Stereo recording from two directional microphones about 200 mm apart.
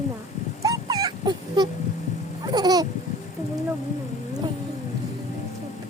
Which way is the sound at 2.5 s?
20° right (ahead or behind).